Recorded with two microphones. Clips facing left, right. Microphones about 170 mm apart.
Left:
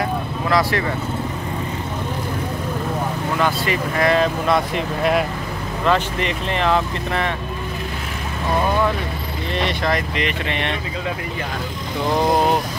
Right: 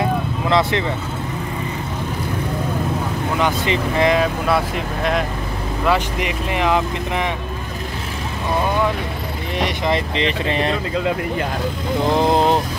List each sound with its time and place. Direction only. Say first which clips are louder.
0.0 s vehicle: right 2 dB; 25° right (ahead or behind)
3.3 s speech: right 1 dB; 20° right (ahead or behind)
4.2 s speech: even; 5° right (ahead or behind)
5.9 s speech: even; 10° right (ahead or behind)
9.6 s speech: right 1 dB; 15° right (ahead or behind)
9.9 s speech: right 2 dB; 30° right (ahead or behind)
12.2 s speech: even; 25° right (ahead or behind)